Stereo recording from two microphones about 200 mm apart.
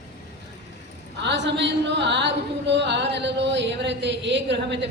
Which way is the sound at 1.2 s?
60° right (ahead or behind).